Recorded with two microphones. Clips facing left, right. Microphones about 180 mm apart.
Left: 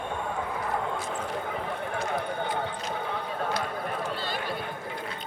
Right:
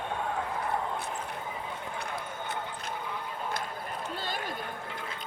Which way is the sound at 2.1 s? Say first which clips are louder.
Left 7 dB; 65° left (ahead or behind).